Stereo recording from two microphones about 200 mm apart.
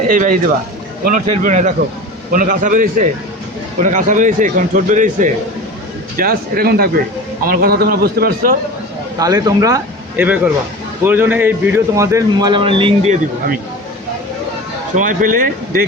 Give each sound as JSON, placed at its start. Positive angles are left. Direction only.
{"t": 0.1, "sound": "a man's voice", "side_deg": -45}
{"t": 9.1, "sound": "a man's voice", "side_deg": -20}
{"t": 14.9, "sound": "a man's voice", "side_deg": -40}